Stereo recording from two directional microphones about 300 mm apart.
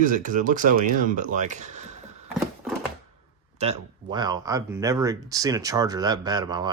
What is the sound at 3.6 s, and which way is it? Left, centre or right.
Speech, centre.